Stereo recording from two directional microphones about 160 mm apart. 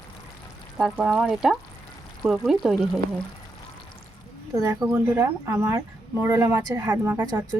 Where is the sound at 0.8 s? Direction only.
5° right (ahead or behind).